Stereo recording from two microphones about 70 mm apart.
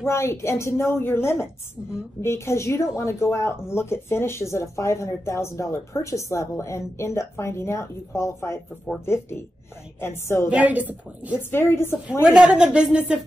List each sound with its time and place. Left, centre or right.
0.0 s a woman's voice: left
10.5 s a woman's voice: right
11.5 s a woman's voice: left
12.3 s a woman's voice: centre